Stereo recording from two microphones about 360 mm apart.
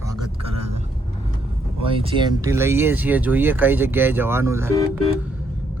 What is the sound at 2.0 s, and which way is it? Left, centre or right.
Speech, centre.